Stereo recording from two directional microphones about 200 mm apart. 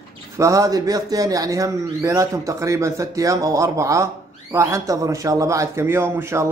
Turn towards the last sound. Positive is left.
turn(degrees=-10)  # may be behind; listen again after turning